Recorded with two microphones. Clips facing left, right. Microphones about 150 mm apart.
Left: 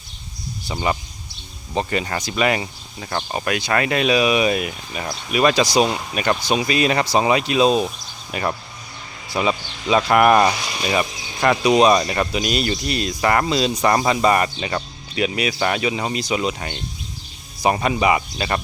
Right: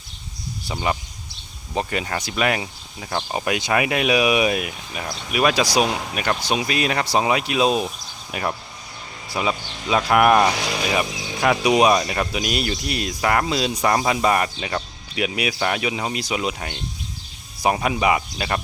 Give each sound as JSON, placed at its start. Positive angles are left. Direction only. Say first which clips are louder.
{"t": 0.7, "sound": "speech", "louder": "left 2 dB", "side_deg": 0}
{"t": 3.3, "sound": "speech", "louder": "even", "side_deg": -15}
{"t": 10.5, "sound": "speech", "louder": "right 3 dB", "side_deg": -90}
{"t": 10.9, "sound": "speech", "louder": "left 1 dB", "side_deg": -5}